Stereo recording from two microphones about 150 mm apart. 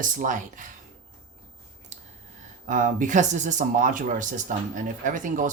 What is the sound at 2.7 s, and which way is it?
Speech, 60° right (ahead or behind).